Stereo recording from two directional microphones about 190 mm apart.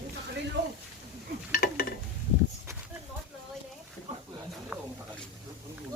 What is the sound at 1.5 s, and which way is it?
Stir, 50° left (ahead or behind).